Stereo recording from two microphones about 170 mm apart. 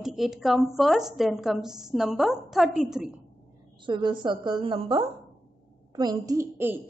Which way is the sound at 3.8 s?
30° right (ahead or behind).